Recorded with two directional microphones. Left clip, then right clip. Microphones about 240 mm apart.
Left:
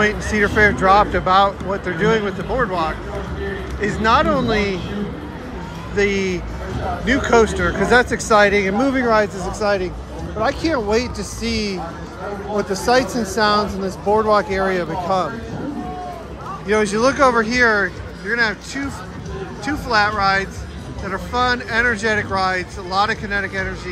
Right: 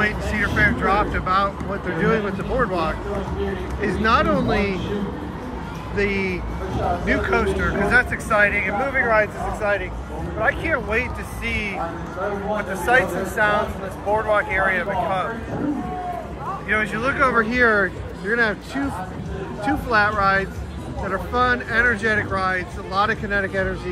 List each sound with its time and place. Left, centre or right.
0.0 s speech: centre
5.9 s speech: centre
10.4 s speech: centre
12.8 s speech: left
16.6 s speech: centre